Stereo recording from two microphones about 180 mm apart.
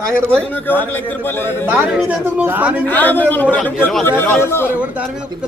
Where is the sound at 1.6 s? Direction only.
5° right (ahead or behind).